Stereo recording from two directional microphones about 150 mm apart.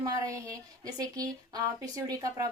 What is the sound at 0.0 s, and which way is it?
Speech, 20° right (ahead or behind).